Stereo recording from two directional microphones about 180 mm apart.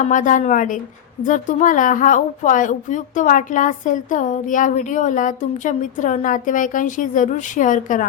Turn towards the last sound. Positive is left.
turn(degrees=45)  # may be behind; listen again after turning